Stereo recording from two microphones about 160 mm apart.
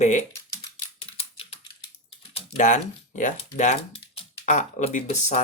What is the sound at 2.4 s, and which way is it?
Speech, 50° left (ahead or behind).